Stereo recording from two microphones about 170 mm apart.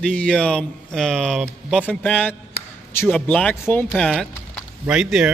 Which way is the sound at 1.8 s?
10° left (ahead or behind).